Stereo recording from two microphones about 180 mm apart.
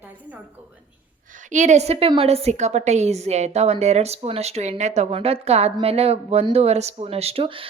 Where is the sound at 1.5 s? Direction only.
40° right (ahead or behind).